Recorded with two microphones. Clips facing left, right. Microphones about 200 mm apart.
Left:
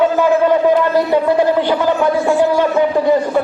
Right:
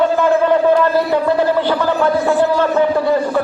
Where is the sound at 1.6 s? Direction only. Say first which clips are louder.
Left 1 dB; 15° left (ahead or behind).